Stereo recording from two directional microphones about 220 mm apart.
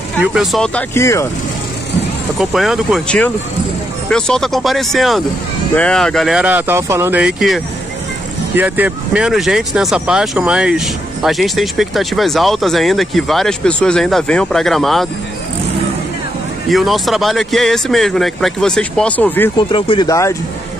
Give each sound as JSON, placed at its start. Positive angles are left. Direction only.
{"t": 0.2, "sound": "speech", "side_deg": 0}
{"t": 2.5, "sound": "speech", "side_deg": 0}
{"t": 16.6, "sound": "speech", "side_deg": 0}
{"t": 19.7, "sound": "speech", "side_deg": 20}